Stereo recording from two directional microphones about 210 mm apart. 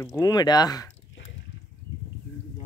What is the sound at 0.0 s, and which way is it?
Speech, 15° left (ahead or behind).